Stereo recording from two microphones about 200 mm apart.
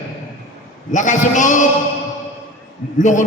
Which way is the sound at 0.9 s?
40° left (ahead or behind).